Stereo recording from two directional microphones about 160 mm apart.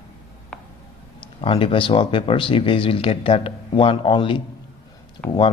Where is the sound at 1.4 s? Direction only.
35° left (ahead or behind).